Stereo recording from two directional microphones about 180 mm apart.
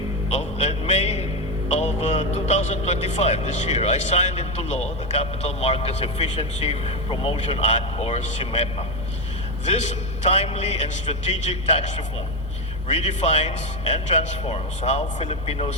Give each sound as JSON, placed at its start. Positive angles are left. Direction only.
{"t": 0.3, "sound": "a sound", "side_deg": 40}
{"t": 1.7, "sound": "a man's voice", "side_deg": 40}
{"t": 10.2, "sound": "a man's voice", "side_deg": 35}